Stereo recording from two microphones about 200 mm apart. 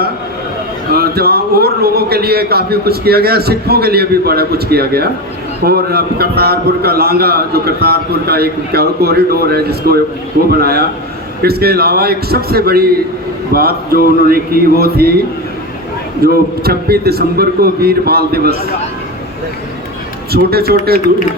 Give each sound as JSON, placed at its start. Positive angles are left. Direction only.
{"t": 0.9, "sound": "a man's voice", "side_deg": -50}
{"t": 16.2, "sound": "a man's voice", "side_deg": -50}
{"t": 20.3, "sound": "a man's voice", "side_deg": -50}